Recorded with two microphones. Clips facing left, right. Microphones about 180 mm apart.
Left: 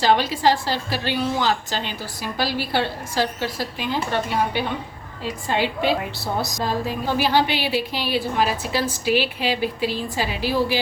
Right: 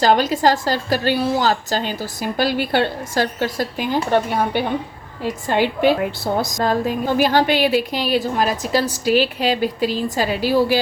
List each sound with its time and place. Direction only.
0.0 s a woman's voice: 45° right (ahead or behind)
5.2 s a woman's voice: 50° right (ahead or behind)